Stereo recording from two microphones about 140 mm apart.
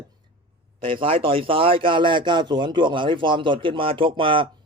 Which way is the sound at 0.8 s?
40° right (ahead or behind).